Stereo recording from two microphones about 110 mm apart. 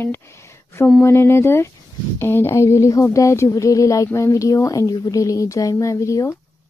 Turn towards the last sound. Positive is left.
turn(degrees=30)  # may be behind; listen again after turning